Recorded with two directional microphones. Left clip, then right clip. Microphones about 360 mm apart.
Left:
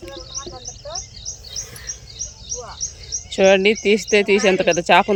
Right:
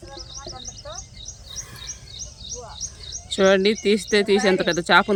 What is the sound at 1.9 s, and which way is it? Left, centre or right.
Bird, right.